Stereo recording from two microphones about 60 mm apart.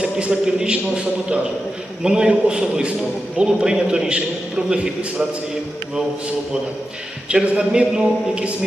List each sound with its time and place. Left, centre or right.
0.0 s a man's voice: centre
7.3 s a man's voice: centre